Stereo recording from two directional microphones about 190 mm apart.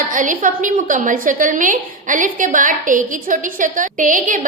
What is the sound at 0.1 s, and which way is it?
A woman's voice, 45° right (ahead or behind).